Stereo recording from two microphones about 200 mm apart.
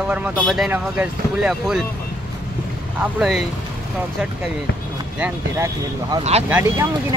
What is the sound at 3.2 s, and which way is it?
Speech, centre (ahead or behind).